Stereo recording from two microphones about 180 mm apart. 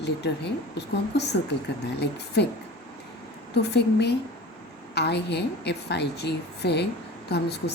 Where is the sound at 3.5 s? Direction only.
70° left (ahead or behind).